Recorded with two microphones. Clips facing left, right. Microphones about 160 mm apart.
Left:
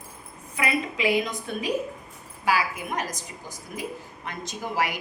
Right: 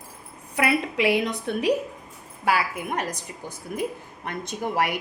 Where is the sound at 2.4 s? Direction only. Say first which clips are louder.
Right 1 dB; 60° right (ahead or behind).